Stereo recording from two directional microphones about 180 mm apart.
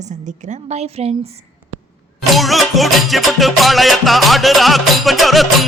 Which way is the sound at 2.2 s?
Centre (ahead or behind).